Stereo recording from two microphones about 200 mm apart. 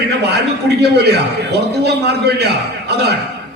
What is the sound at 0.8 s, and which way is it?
A man's voice, 55° right (ahead or behind).